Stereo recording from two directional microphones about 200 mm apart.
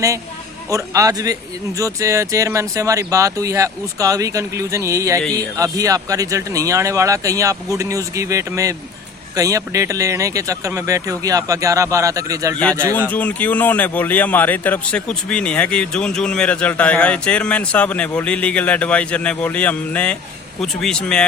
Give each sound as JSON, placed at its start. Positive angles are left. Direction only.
{"t": 0.7, "sound": "speech", "side_deg": -15}
{"t": 13.0, "sound": "speech", "side_deg": 10}